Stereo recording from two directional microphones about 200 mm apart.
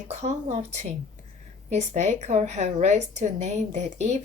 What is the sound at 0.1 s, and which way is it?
A woman's voice, 35° right (ahead or behind).